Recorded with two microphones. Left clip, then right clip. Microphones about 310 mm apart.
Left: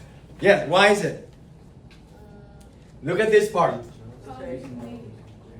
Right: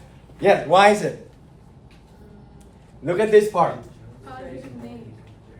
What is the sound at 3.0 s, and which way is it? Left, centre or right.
Speech, centre.